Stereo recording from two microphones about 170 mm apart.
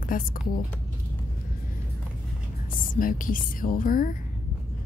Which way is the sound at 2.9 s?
55° left (ahead or behind).